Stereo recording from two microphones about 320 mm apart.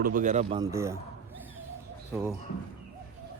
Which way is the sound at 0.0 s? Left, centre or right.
Right.